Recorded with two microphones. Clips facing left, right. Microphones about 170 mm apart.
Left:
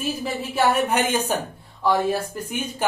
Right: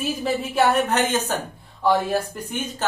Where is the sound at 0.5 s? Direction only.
10° left (ahead or behind).